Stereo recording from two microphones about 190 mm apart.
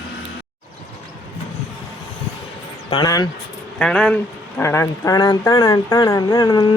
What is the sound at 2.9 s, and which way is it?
Speech, 20° left (ahead or behind).